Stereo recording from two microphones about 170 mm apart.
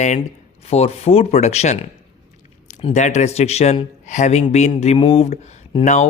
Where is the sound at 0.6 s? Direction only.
40° left (ahead or behind).